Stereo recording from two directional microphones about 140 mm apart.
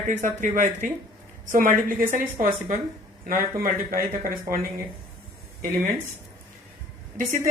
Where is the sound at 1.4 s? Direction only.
85° right.